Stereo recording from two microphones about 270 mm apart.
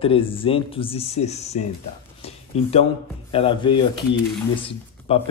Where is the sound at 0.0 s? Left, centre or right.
Centre.